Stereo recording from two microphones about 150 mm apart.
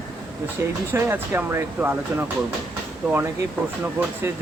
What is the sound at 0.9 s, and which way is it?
Speech, 15° right (ahead or behind).